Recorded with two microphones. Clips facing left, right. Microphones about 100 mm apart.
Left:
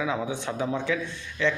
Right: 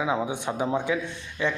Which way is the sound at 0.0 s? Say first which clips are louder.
Right 2 dB; 20° right (ahead or behind).